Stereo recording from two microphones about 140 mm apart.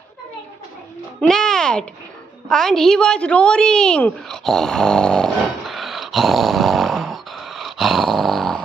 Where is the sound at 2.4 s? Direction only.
5° left (ahead or behind).